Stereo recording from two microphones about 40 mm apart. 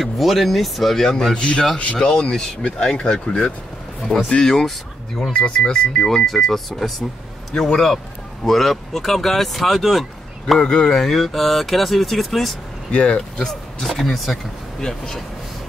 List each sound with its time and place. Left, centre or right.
0.0 s speech: centre
1.3 s speech: left
2.0 s speech: centre
4.1 s speech: left
4.5 s speech: centre
5.3 s speech: left
5.9 s speech: centre
7.5 s speech: centre
8.5 s speech: centre
10.6 s speech: left
11.0 s speech: centre
12.9 s speech: left
13.5 s speech: centre